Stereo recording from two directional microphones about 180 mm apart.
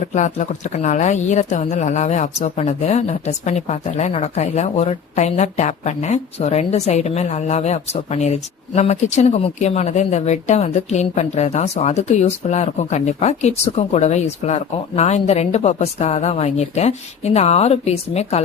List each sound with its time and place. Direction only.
0.1 s speech: 40° left (ahead or behind)